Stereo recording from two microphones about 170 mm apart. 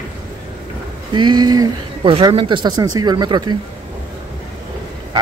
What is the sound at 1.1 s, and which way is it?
Speech, 25° right (ahead or behind).